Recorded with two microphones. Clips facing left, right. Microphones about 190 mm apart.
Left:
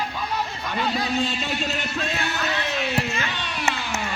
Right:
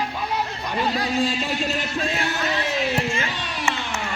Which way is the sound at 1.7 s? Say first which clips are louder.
Right 2 dB; 30° right (ahead or behind).